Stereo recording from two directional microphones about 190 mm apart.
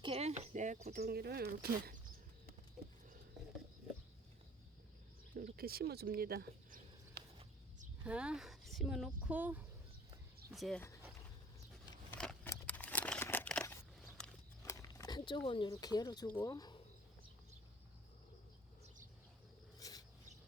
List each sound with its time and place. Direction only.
0.0 s bird: 30° right (ahead or behind)
0.9 s speech: 55° right (ahead or behind)
5.3 s speech: 50° right (ahead or behind)
8.0 s speech: 5° right (ahead or behind)
10.8 s speech: 15° left (ahead or behind)
12.1 s a sound: 5° left (ahead or behind); by 15.4 s 20° left (ahead or behind)
15.4 s speech: 25° left (ahead or behind)
19.8 s a sound: 20° left (ahead or behind)